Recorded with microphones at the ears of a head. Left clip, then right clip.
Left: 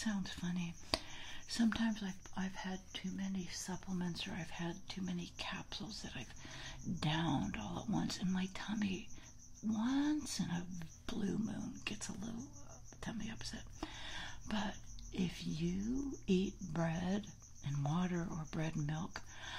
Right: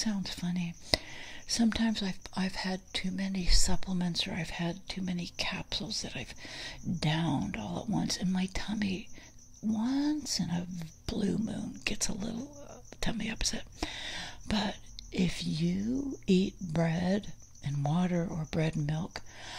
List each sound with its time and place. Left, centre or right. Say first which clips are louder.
0.0 s speech: right 7 dB; right